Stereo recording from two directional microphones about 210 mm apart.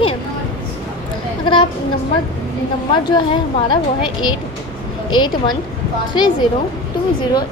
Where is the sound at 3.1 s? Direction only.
20° left (ahead or behind).